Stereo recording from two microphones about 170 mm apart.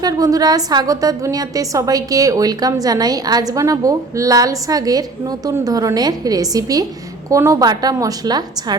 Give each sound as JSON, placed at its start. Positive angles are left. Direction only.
{"t": 0.0, "sound": "a woman's voice", "side_deg": -20}